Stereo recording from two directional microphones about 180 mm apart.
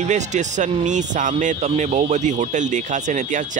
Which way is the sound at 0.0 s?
40° right (ahead or behind).